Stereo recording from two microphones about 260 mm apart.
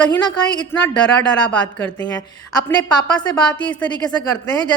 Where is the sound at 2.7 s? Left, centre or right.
Centre.